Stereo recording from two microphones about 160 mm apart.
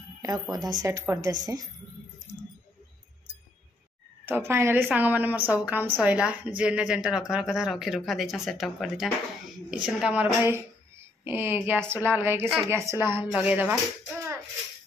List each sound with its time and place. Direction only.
0.2 s a woman's voice: 25° right (ahead or behind)
4.3 s a woman's voice: 15° right (ahead or behind)